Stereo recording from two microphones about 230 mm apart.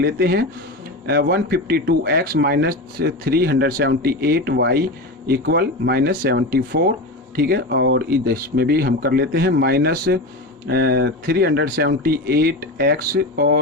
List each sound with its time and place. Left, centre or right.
0.0 s a man's voice: right